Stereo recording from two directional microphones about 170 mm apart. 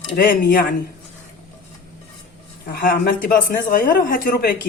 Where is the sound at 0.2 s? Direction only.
60° left (ahead or behind).